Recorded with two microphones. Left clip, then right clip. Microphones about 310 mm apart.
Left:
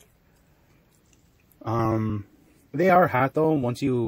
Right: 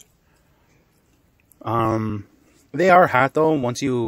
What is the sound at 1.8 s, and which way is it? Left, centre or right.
Speech, right.